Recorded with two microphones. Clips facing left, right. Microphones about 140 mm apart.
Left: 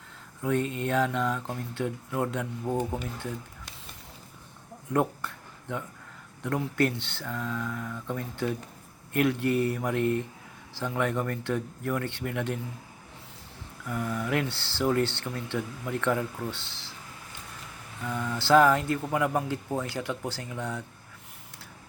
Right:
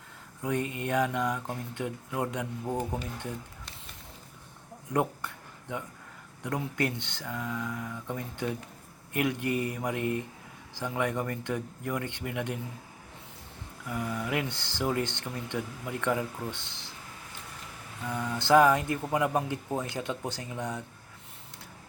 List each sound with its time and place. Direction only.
0.4 s speech: 15° right (ahead or behind)
2.6 s speech: 5° left (ahead or behind)
4.9 s a sound: 15° right (ahead or behind)
6.4 s speech: 15° right (ahead or behind)
13.8 s speech: 10° right (ahead or behind)
18.0 s speech: 15° right (ahead or behind)